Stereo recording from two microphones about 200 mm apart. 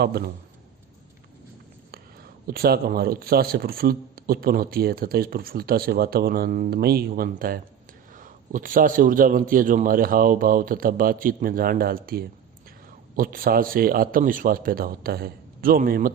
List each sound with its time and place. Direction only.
0.0 s speech: 50° right (ahead or behind)
2.5 s speech: 50° right (ahead or behind)